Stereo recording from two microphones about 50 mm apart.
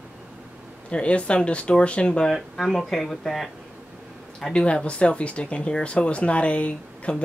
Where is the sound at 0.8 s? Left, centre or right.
Left; by 3.5 s centre.